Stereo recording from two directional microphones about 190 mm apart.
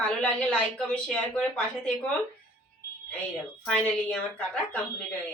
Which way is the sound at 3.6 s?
5° left (ahead or behind).